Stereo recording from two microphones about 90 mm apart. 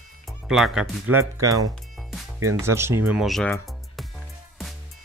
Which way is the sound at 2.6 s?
30° right (ahead or behind).